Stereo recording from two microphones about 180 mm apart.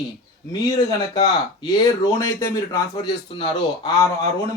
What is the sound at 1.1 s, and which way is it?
Speech, 25° left (ahead or behind).